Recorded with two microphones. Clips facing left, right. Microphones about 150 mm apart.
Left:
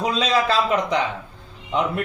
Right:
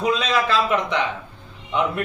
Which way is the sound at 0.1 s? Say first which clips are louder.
Even; 35° left (ahead or behind).